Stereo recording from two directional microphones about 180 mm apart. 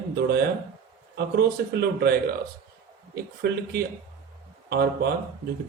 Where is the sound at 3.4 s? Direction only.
60° right (ahead or behind).